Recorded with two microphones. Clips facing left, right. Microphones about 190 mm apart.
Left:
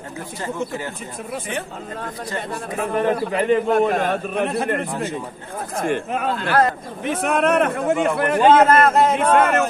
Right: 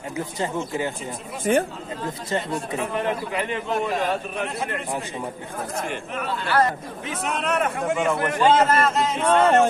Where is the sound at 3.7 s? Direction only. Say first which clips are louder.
Left 6 dB; 55° left (ahead or behind).